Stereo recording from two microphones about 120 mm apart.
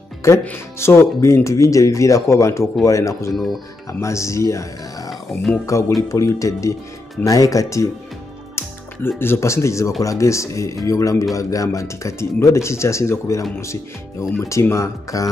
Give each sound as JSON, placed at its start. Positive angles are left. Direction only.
{"t": 0.2, "sound": "speech", "side_deg": 20}
{"t": 9.2, "sound": "speech", "side_deg": 20}
{"t": 14.4, "sound": "speech", "side_deg": 25}